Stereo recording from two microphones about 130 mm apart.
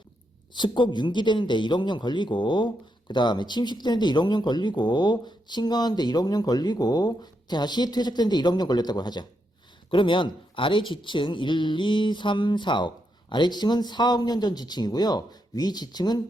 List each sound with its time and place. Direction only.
0.5 s speech: 35° left (ahead or behind)